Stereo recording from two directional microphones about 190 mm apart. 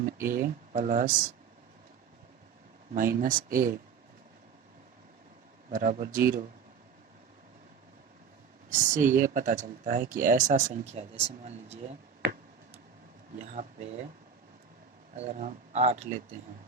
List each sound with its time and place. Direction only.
0.0 s speech: 45° right (ahead or behind)
2.9 s speech: 45° right (ahead or behind)
5.6 s speech: 45° right (ahead or behind)
8.7 s speech: 40° right (ahead or behind)
13.4 s speech: 40° right (ahead or behind)
15.1 s speech: 35° right (ahead or behind)